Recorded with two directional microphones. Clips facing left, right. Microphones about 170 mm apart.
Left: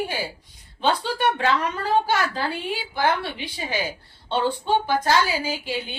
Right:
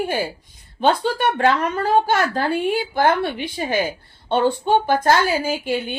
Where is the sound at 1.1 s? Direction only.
50° right (ahead or behind).